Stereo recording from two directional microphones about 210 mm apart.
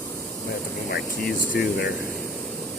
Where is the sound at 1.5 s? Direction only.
45° left (ahead or behind).